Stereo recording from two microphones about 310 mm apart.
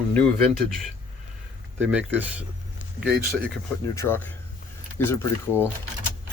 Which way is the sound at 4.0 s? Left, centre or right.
Centre.